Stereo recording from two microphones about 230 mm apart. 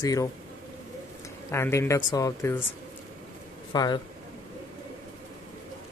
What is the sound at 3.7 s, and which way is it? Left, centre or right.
Speech, centre.